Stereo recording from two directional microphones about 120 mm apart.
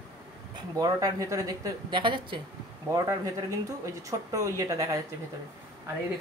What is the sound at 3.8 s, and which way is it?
Speech, 25° right (ahead or behind).